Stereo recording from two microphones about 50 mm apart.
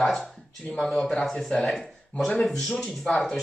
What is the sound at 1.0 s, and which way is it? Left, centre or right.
Speech, centre.